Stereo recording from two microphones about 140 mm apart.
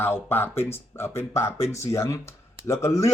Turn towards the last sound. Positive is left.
turn(degrees=20)  # may be behind; listen again after turning